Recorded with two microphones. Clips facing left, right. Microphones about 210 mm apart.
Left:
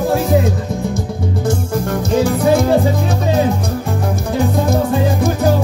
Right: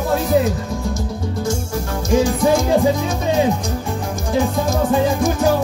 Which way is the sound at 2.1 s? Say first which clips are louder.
Left 1 dB; 60° left (ahead or behind).